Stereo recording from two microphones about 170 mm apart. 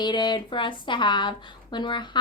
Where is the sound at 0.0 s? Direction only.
25° left (ahead or behind).